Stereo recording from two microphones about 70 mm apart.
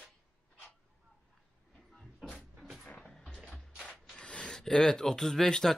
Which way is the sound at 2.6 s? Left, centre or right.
Centre.